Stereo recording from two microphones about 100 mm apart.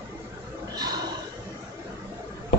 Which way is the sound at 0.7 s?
45° right (ahead or behind).